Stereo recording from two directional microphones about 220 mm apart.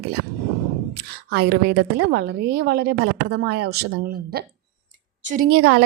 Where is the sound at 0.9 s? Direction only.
50° right (ahead or behind).